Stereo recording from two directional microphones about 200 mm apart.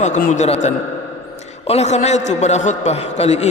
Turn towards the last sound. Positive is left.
turn(degrees=35)  # may be behind; listen again after turning